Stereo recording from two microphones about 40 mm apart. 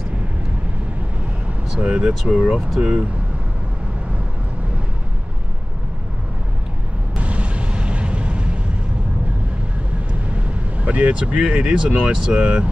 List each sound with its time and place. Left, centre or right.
1.8 s speech: right
7.2 s a sound: right
10.8 s speech: right
11.1 s speech: right